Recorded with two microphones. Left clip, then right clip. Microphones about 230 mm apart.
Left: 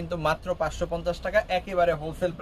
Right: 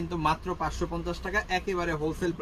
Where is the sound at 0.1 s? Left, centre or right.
Left.